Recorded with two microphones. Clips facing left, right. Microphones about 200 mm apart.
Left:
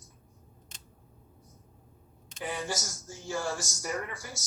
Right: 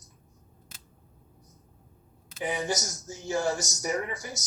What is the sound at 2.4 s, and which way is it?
Speech, 20° right (ahead or behind).